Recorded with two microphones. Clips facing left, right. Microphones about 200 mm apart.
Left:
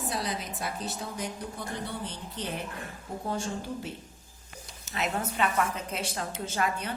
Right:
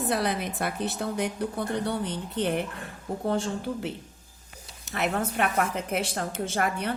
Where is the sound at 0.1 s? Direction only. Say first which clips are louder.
Right 7 dB; 60° right (ahead or behind).